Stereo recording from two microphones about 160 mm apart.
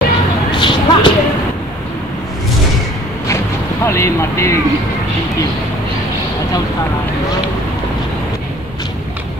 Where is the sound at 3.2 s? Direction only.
15° left (ahead or behind).